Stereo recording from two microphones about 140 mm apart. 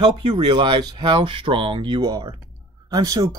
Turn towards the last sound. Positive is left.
turn(degrees=-25)  # may be behind; listen again after turning